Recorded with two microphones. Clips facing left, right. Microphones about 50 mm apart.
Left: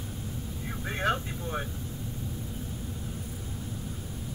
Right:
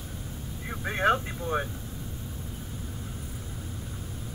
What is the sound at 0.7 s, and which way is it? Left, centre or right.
Speech, centre.